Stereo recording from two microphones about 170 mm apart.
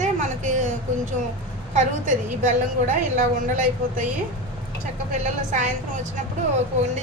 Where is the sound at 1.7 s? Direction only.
50° right (ahead or behind).